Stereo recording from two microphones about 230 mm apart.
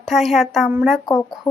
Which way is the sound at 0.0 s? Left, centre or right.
Centre.